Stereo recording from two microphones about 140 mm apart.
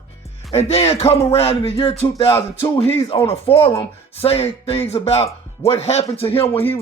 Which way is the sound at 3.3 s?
45° left (ahead or behind).